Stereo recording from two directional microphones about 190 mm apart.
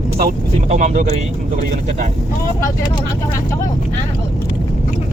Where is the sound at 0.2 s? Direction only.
45° right (ahead or behind).